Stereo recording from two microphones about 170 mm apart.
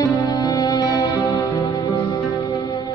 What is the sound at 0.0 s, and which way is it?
Music, 20° left (ahead or behind).